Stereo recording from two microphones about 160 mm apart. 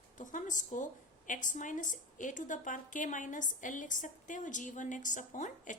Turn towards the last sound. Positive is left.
turn(degrees=50)  # may be behind; listen again after turning